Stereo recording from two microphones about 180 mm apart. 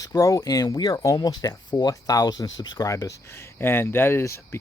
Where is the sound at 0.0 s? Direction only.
20° left (ahead or behind).